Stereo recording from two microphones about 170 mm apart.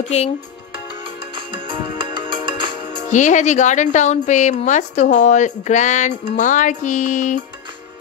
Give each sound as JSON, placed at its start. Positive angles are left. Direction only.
{"t": 1.3, "sound": "music", "side_deg": -30}
{"t": 3.1, "sound": "speech", "side_deg": 45}